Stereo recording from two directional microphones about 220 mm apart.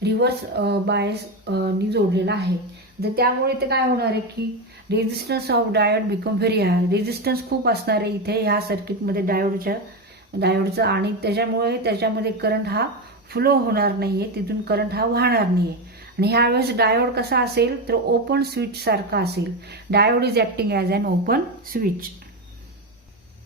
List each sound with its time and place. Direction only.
0.0 s speech: 50° right (ahead or behind)